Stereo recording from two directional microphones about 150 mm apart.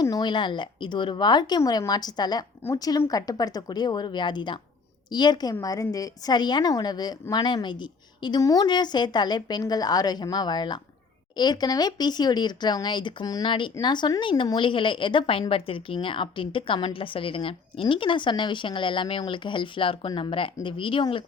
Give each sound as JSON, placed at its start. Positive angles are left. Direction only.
{"t": 0.0, "sound": "a woman's voice", "side_deg": 25}